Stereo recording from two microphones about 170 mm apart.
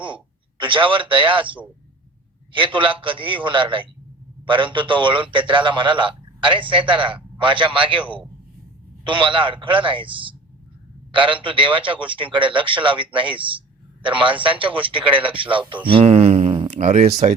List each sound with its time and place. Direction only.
0.6 s a man's voice: 30° right (ahead or behind)
9.0 s a man's voice: 30° right (ahead or behind)